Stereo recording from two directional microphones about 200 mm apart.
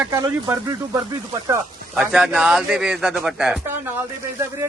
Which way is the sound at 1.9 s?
Centre (ahead or behind).